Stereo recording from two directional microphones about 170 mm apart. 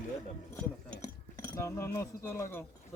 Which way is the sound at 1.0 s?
20° left (ahead or behind).